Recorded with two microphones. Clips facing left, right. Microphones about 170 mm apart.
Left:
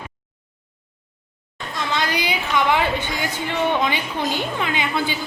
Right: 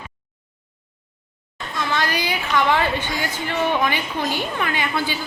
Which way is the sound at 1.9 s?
15° left (ahead or behind).